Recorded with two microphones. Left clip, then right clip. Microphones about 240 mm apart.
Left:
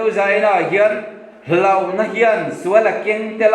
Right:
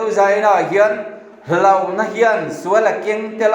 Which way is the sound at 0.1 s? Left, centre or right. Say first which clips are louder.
Right 3 dB; centre.